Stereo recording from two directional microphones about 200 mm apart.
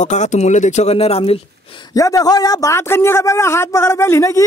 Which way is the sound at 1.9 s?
15° left (ahead or behind).